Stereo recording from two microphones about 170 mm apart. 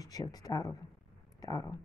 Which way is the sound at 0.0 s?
20° left (ahead or behind).